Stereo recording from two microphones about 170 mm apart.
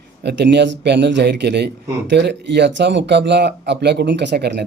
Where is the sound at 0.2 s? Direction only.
85° right.